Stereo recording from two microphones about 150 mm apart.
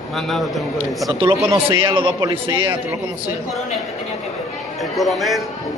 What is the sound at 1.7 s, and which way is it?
A man's voice, 30° right (ahead or behind).